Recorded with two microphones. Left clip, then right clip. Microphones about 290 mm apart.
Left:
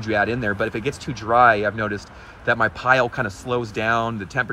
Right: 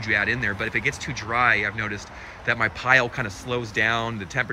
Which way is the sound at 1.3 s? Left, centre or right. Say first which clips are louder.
Left 6 dB; centre.